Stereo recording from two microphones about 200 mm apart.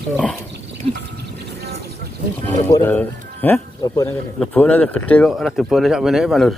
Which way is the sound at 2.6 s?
15° left (ahead or behind).